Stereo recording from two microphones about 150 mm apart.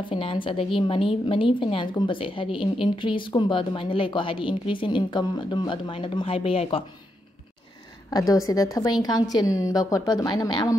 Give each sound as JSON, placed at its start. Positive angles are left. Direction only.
{"t": 0.1, "sound": "a woman's voice", "side_deg": 35}
{"t": 8.1, "sound": "a woman's voice", "side_deg": 25}